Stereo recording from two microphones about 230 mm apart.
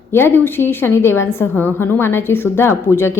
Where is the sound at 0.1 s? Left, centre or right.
Centre.